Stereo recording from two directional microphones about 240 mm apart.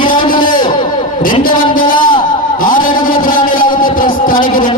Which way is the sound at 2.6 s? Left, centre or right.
Left.